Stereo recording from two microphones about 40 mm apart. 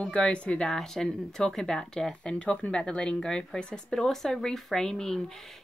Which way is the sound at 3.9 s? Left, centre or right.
Centre.